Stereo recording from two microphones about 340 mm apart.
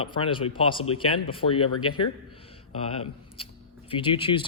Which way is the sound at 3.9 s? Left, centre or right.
Centre.